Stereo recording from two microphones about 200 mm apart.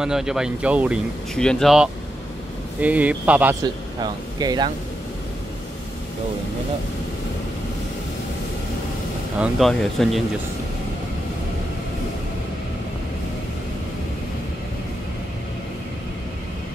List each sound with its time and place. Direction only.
0.0 s speech: 5° right (ahead or behind)
3.6 s speech: 20° right (ahead or behind)
9.4 s speech: centre (ahead or behind)